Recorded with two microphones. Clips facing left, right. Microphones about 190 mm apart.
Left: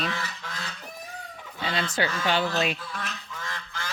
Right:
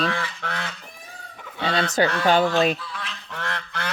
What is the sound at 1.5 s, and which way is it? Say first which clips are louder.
Speech: right 6 dB; 70° right (ahead or behind).